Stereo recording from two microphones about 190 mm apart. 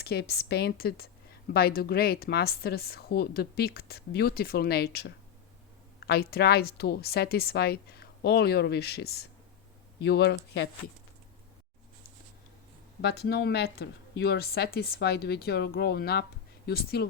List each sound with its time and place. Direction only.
0.0 s speech: 55° left (ahead or behind)
13.0 s speech: 60° left (ahead or behind)